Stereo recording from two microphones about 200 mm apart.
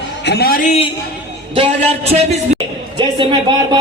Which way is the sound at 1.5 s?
30° right (ahead or behind).